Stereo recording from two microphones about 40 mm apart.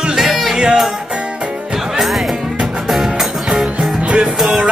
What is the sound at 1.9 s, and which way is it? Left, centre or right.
Music, centre.